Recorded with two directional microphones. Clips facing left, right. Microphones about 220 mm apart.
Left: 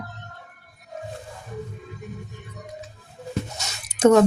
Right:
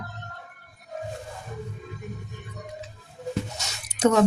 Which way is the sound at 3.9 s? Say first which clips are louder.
Left 5 dB; 50° left (ahead or behind).